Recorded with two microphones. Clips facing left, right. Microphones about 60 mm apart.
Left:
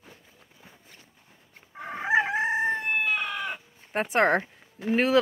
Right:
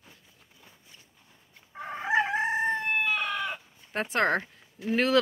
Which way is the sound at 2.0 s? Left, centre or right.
Centre.